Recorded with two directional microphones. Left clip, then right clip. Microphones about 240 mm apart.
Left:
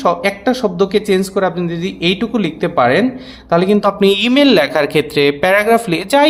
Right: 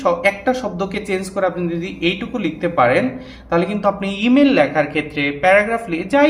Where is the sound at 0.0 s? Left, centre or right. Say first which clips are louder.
Left 2 dB; left.